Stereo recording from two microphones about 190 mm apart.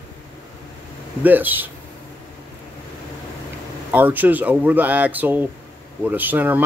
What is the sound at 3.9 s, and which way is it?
Speech, 10° right (ahead or behind).